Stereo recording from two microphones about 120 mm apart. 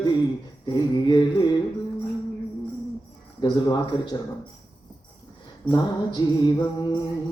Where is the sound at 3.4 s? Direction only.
35° left (ahead or behind).